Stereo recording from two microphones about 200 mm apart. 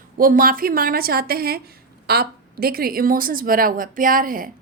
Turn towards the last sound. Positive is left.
turn(degrees=-45)  # may be behind; listen again after turning